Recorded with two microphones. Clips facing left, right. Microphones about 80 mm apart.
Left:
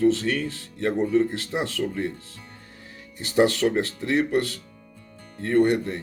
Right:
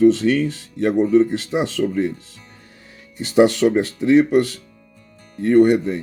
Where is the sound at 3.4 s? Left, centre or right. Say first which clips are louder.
Right 6 dB; right.